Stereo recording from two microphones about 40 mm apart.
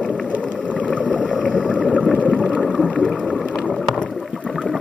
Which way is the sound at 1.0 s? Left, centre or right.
Left.